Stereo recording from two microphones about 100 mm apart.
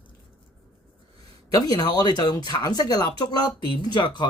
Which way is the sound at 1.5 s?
45° left (ahead or behind).